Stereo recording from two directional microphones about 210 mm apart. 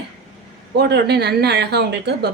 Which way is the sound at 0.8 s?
50° right (ahead or behind).